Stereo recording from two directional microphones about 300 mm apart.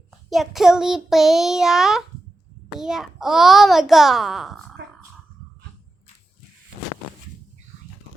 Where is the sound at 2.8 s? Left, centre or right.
Centre.